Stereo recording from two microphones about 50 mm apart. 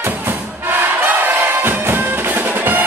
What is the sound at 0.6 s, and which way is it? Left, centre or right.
Music, right.